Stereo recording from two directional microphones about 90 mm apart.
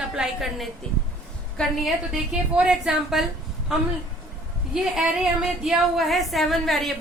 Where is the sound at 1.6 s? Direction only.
10° left (ahead or behind).